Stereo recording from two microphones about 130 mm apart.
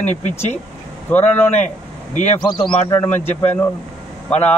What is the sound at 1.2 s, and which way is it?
Speech, 65° left (ahead or behind).